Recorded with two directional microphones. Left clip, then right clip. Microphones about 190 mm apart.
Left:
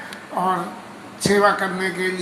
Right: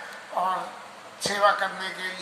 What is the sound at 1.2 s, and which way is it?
Speech, 15° left (ahead or behind).